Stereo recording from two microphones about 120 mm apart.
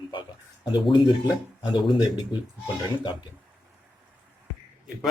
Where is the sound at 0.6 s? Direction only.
40° left (ahead or behind).